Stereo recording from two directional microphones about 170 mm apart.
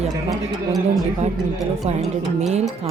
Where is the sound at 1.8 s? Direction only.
40° right (ahead or behind).